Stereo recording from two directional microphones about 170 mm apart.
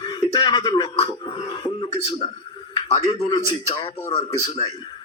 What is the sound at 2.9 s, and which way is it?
Speech, 25° left (ahead or behind).